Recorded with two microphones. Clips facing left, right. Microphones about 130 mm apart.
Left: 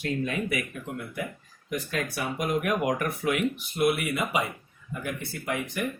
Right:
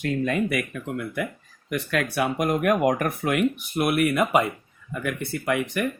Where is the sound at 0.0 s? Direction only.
55° right (ahead or behind).